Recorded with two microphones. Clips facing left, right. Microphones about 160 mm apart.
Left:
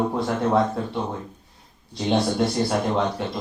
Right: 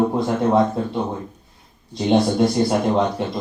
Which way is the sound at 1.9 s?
20° right (ahead or behind).